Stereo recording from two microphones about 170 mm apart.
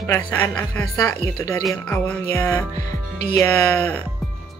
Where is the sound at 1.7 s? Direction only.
10° left (ahead or behind).